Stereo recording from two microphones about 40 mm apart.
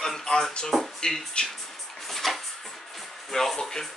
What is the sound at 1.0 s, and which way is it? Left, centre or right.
Speech, centre.